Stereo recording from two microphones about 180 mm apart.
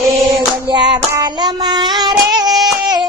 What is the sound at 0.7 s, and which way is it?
Child singing, 25° right (ahead or behind).